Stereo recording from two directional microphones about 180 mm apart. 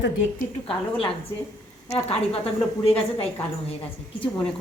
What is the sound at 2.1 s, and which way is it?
Speech, 35° left (ahead or behind).